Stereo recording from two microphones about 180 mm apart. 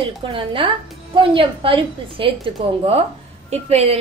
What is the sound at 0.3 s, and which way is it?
A woman's voice, 30° right (ahead or behind).